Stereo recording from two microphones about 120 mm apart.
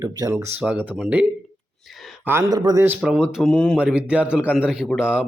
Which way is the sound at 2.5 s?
35° right (ahead or behind).